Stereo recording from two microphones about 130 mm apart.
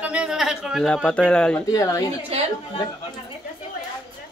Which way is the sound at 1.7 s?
25° left (ahead or behind).